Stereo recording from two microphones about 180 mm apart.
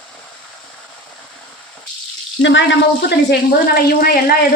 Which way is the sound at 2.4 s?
90° left.